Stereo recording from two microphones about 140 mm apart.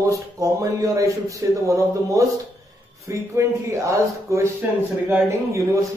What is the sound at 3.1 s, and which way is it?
Speech, 20° right (ahead or behind).